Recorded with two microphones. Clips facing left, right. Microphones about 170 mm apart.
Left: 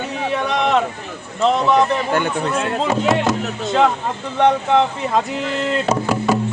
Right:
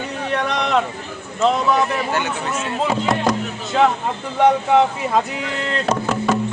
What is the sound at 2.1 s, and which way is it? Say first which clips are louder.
Speech: left 4 dB; 55° left (ahead or behind).